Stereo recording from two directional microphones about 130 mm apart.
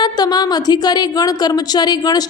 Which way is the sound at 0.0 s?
30° left (ahead or behind).